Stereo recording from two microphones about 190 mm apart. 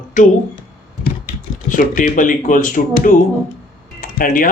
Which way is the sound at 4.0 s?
45° left (ahead or behind).